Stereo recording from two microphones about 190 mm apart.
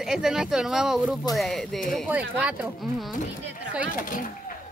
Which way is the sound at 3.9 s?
45° left (ahead or behind).